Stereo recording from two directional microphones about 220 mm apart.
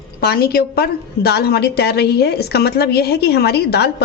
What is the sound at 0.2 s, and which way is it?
A woman's voice, 45° left (ahead or behind).